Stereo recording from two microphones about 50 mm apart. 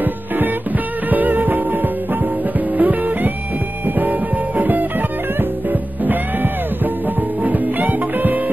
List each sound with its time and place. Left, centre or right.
1.1 s music: right
2.8 s music: right